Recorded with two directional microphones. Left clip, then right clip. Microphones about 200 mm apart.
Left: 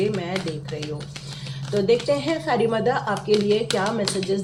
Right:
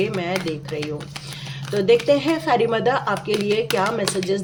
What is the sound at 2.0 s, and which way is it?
Speech, 60° right (ahead or behind).